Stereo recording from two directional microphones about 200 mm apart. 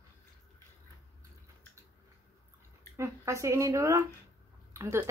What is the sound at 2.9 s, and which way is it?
Speech, 15° right (ahead or behind).